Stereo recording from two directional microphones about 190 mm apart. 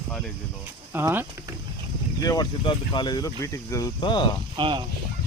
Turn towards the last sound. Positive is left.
turn(degrees=-25)  # may be behind; listen again after turning